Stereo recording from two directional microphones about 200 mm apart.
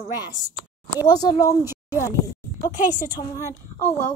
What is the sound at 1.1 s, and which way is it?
Speech, 20° left (ahead or behind).